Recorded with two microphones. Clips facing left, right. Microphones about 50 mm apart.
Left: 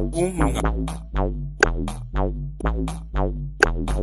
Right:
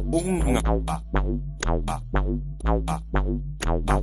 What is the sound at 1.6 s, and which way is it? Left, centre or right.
Music, left.